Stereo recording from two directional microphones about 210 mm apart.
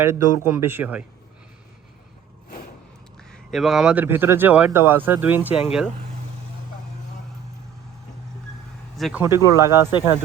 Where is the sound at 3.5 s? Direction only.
Centre (ahead or behind).